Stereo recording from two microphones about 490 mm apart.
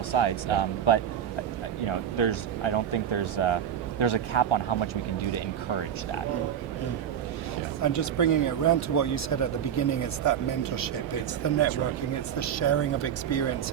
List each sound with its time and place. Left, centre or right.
0.1 s speech: left
7.8 s speech: left
12.4 s speech: left